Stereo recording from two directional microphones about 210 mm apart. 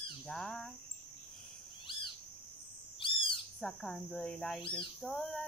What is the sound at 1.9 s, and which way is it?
Cricket, 25° left (ahead or behind).